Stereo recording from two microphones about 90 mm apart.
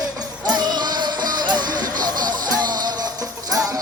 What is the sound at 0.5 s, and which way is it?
Music, 50° right (ahead or behind).